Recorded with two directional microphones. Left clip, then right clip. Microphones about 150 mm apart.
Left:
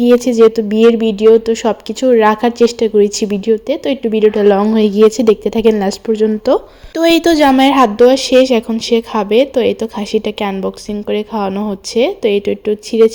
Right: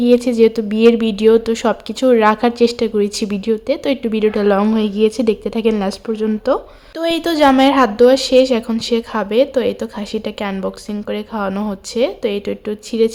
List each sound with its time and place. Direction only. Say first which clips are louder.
0.0 s speech: left 4 dB; 10° left (ahead or behind)
4.7 s speech: left 6 dB; 20° left (ahead or behind)
6.9 s a woman's voice: left 7 dB; 35° left (ahead or behind)
7.3 s a woman's voice: left 2 dB; 20° left (ahead or behind)